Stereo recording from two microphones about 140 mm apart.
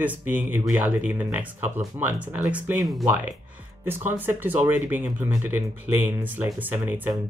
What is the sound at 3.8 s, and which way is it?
Speech, 15° right (ahead or behind).